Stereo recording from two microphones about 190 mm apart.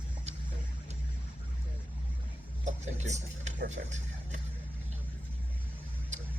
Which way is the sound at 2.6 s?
40° right (ahead or behind).